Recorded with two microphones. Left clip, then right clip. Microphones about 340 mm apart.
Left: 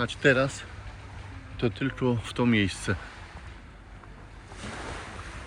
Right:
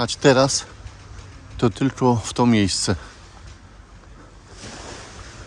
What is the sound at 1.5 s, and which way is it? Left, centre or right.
Speech, right.